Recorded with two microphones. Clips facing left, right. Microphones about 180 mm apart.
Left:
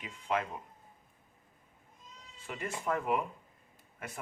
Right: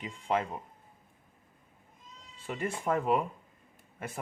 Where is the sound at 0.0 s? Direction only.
30° right (ahead or behind).